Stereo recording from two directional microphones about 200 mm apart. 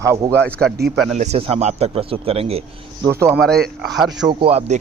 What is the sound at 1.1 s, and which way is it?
A man's voice, 35° right (ahead or behind).